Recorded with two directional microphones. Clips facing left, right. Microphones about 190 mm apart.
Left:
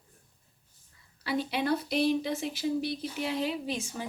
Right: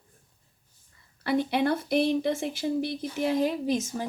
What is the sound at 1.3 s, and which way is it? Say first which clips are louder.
Speech: right 4 dB; 55° right (ahead or behind).